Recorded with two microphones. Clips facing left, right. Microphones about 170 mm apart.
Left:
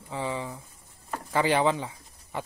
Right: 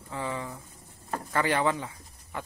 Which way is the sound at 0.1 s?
20° left (ahead or behind).